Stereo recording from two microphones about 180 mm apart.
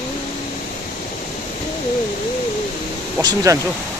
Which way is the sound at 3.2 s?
20° right (ahead or behind).